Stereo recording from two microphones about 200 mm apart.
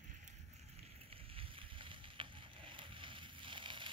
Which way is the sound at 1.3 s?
25° right (ahead or behind).